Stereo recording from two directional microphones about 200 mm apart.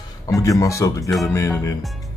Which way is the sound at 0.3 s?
15° left (ahead or behind).